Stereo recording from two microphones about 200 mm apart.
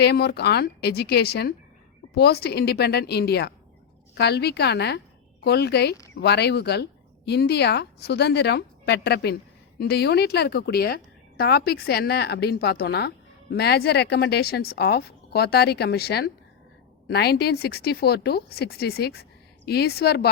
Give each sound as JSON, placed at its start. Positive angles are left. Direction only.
{"t": 0.0, "sound": "a woman's voice", "side_deg": 55}